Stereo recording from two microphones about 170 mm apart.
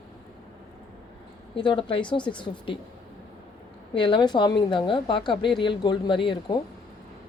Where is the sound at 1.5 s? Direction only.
30° left (ahead or behind).